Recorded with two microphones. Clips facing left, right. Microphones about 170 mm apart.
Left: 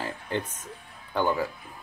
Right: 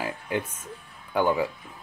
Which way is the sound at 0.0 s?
10° right (ahead or behind).